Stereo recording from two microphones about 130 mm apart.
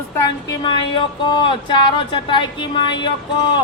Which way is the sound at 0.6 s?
40° left (ahead or behind).